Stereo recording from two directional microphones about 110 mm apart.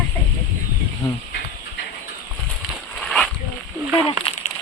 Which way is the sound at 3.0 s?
5° left (ahead or behind).